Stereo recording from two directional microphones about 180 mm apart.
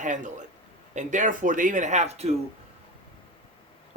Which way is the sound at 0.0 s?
45° right (ahead or behind).